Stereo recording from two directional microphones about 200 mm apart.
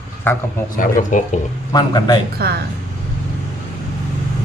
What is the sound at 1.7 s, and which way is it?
Speech, 20° left (ahead or behind).